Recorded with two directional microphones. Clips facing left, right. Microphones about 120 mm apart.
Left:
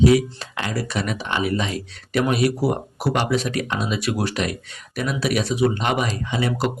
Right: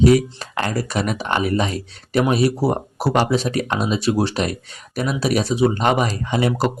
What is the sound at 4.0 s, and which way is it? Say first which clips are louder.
Speech: right 4 dB; 30° right (ahead or behind).